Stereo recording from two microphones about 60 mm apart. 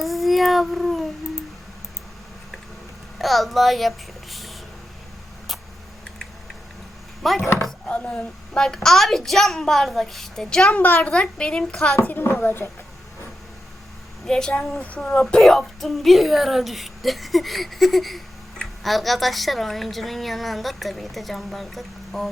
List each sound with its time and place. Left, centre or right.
0.0 s a sound: centre
3.2 s a child's voice: centre
7.2 s speech: centre
7.4 s speech: left
7.9 s a woman's voice: left
10.7 s a child's voice: left
11.0 s a woman's voice: centre
12.0 s a woman's voice: left
14.3 s a woman's voice: centre